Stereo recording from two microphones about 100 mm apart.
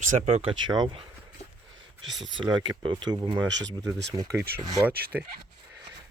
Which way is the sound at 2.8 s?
50° right (ahead or behind).